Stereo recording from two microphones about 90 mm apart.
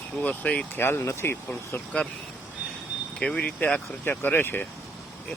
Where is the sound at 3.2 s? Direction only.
10° left (ahead or behind).